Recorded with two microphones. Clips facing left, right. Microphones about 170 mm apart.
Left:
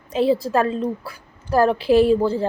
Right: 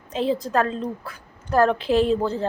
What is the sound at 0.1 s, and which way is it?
A woman's voice, 10° left (ahead or behind).